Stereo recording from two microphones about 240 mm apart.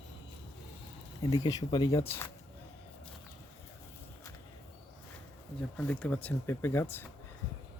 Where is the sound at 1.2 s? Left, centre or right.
Centre.